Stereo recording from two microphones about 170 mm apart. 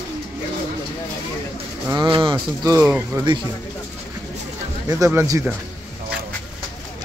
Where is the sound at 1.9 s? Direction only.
30° right (ahead or behind); by 3.3 s 15° right (ahead or behind).